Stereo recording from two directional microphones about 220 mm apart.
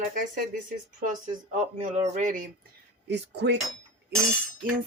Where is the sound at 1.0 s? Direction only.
35° right (ahead or behind).